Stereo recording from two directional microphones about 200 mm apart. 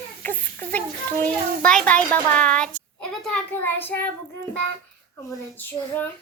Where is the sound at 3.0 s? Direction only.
5° left (ahead or behind).